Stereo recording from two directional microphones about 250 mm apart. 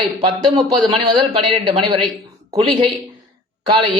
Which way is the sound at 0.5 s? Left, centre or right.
Centre.